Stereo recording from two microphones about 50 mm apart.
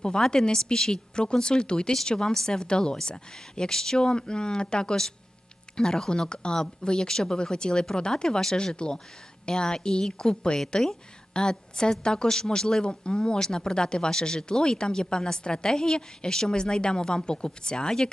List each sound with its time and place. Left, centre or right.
0.0 s a woman's voice: centre